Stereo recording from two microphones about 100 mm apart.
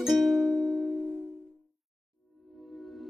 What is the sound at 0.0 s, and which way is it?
Music, centre (ahead or behind).